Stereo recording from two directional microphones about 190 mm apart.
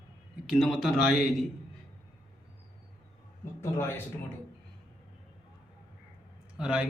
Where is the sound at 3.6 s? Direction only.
15° left (ahead or behind).